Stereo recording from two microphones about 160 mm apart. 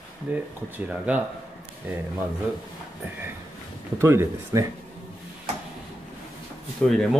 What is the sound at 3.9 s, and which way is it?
Mantra, 15° right (ahead or behind).